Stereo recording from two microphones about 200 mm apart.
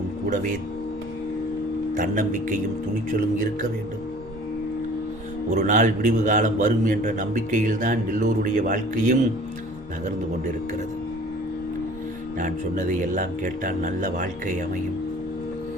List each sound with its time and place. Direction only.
2.0 s a man's voice: 40° right (ahead or behind)
5.5 s a man's voice: 35° right (ahead or behind)
12.4 s a man's voice: 40° right (ahead or behind)